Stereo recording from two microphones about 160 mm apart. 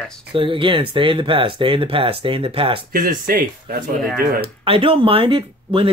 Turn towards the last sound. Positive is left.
turn(degrees=-35)  # may be behind; listen again after turning